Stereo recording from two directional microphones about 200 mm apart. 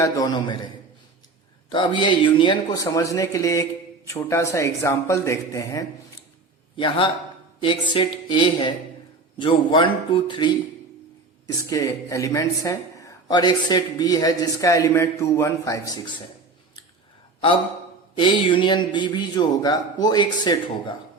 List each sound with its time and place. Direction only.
0.0 s a man's voice: 20° left (ahead or behind)
1.7 s a man's voice: 25° left (ahead or behind)
18.1 s a man's voice: 25° left (ahead or behind)